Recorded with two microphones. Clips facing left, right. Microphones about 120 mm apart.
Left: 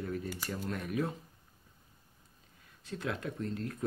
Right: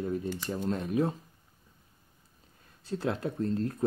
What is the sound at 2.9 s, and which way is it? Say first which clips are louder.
Speech: right 6 dB; 30° right (ahead or behind).